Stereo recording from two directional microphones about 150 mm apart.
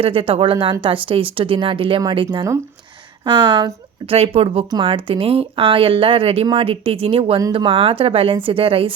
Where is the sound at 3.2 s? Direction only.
30° right (ahead or behind).